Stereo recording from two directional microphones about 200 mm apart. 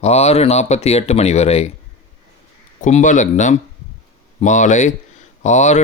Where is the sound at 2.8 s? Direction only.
40° left (ahead or behind).